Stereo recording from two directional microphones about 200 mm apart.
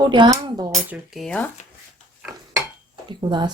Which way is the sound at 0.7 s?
Centre (ahead or behind).